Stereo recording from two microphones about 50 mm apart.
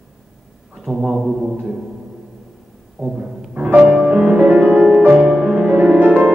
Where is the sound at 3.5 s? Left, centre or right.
Right.